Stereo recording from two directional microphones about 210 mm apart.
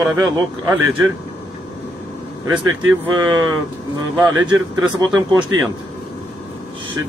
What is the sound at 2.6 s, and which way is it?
Speech, 80° right.